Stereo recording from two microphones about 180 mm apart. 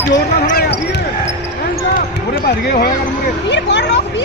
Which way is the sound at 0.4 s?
60° left (ahead or behind).